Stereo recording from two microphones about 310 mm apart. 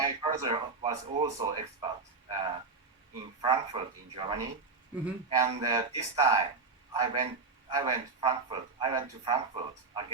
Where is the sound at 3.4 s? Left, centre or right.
Centre.